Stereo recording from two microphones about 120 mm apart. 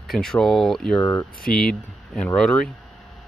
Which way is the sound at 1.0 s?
25° left (ahead or behind).